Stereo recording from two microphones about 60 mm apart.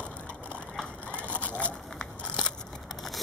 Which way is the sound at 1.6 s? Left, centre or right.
Centre.